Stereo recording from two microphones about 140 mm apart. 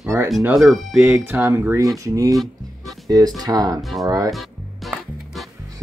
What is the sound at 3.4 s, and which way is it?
Cutlery, 25° right (ahead or behind).